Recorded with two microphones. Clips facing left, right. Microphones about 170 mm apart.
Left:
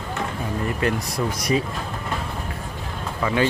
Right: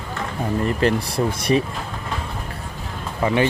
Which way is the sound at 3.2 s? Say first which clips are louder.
Right 2 dB; 25° right (ahead or behind).